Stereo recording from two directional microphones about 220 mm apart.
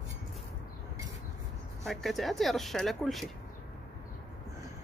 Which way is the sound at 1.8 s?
Centre (ahead or behind).